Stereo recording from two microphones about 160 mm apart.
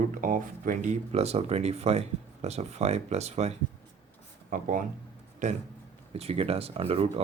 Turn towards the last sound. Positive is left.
turn(degrees=-40)  # may be behind; listen again after turning